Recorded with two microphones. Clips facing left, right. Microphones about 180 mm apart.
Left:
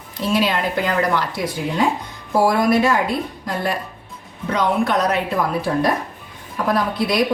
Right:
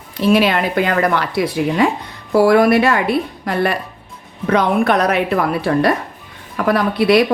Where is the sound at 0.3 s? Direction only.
65° right (ahead or behind).